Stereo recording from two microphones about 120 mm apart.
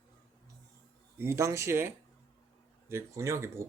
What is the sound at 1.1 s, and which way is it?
Speech, 20° right (ahead or behind).